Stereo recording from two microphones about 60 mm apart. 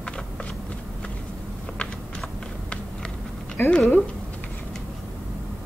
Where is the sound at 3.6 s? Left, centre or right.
Left.